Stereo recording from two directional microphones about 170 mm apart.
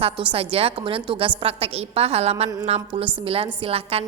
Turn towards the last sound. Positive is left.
turn(degrees=-35)  # may be behind; listen again after turning